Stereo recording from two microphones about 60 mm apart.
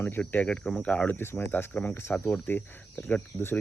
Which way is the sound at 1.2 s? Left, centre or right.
Left.